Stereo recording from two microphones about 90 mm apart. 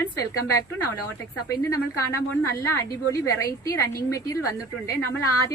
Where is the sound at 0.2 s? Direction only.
40° left (ahead or behind).